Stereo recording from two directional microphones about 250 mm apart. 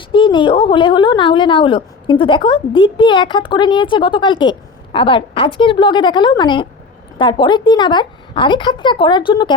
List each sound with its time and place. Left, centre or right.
0.1 s a woman's voice: centre